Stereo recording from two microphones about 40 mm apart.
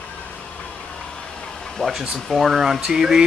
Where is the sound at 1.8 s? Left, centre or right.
Centre.